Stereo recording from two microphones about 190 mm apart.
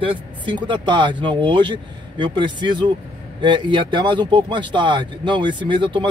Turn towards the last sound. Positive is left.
turn(degrees=-25)  # may be behind; listen again after turning